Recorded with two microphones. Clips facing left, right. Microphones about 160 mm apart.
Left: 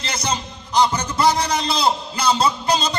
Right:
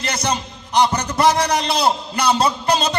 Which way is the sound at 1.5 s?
65° right (ahead or behind).